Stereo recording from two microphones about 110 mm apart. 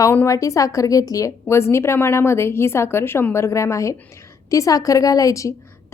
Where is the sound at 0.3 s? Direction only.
30° left (ahead or behind).